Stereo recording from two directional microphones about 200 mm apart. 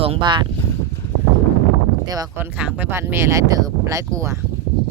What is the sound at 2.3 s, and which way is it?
Speech, 10° right (ahead or behind).